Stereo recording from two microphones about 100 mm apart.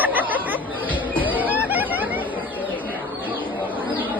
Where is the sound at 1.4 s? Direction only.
15° right (ahead or behind).